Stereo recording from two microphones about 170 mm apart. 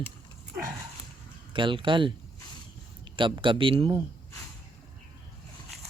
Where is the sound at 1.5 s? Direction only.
30° right (ahead or behind).